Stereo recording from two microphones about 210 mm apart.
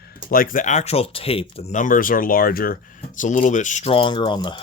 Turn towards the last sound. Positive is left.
turn(degrees=20)  # may be behind; listen again after turning